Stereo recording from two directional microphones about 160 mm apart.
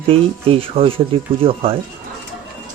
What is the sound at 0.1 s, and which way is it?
Speech, 35° right (ahead or behind).